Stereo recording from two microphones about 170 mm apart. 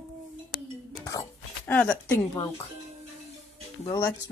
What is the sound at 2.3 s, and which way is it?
Speech, 25° left (ahead or behind).